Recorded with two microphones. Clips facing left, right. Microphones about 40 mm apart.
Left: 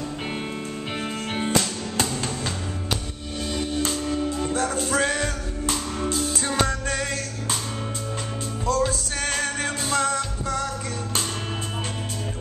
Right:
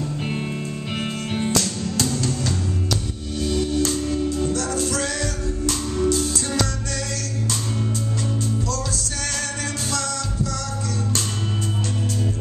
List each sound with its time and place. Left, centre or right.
1.3 s music: left
8.6 s music: left